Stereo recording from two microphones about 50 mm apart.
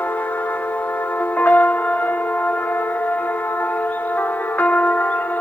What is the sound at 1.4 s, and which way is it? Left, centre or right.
Music, left.